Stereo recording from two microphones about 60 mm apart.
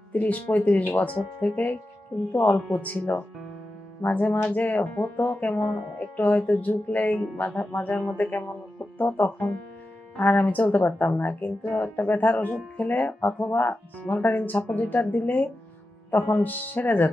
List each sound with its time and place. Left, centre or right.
0.1 s speech: left